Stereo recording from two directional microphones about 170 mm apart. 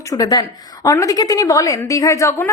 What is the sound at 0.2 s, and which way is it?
A woman's voice, 25° left (ahead or behind).